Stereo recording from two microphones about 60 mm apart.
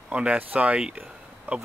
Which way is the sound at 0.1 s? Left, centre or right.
Centre.